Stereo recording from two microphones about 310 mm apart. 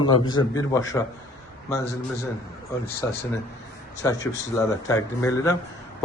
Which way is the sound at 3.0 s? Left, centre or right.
Centre.